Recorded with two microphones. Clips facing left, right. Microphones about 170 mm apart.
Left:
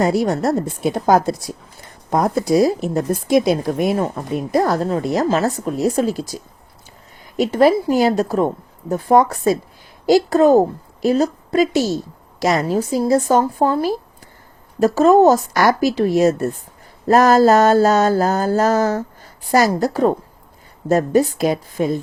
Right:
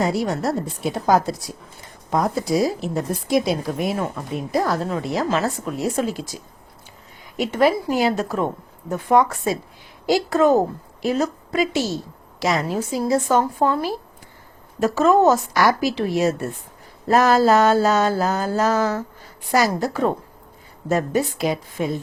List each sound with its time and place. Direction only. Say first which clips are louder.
0.0 s a woman's voice: left 4 dB; 50° left (ahead or behind)